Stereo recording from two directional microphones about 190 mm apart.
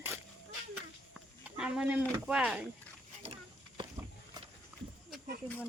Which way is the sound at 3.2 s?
30° right (ahead or behind).